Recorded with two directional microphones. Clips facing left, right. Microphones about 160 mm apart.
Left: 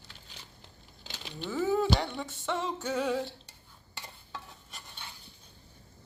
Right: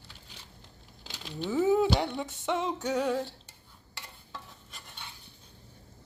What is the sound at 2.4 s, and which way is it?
Speech, 15° right (ahead or behind).